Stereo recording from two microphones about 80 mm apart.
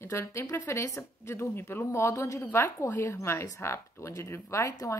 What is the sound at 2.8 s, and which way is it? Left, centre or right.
Speech, left.